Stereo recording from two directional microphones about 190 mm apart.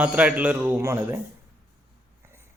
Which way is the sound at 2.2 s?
15° right (ahead or behind).